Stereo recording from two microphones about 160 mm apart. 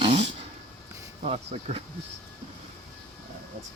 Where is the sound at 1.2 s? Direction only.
35° right (ahead or behind).